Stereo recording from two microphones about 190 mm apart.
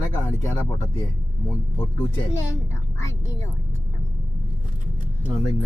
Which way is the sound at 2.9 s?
15° left (ahead or behind).